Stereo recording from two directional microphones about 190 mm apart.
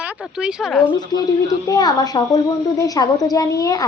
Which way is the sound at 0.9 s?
20° left (ahead or behind).